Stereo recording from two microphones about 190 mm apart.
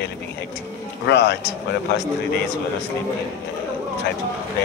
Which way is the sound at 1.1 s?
60° left (ahead or behind).